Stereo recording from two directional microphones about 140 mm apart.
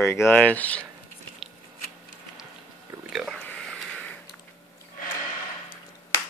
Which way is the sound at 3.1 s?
Centre (ahead or behind).